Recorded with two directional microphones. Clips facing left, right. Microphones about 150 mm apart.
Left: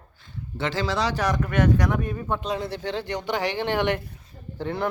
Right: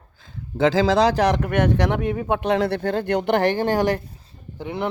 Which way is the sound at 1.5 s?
60° right (ahead or behind).